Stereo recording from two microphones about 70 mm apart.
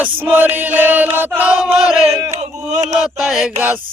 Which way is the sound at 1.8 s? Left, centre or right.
Centre.